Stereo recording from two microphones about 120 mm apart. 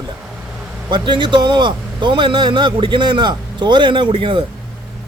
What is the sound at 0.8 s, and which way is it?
A man's voice, 40° right (ahead or behind).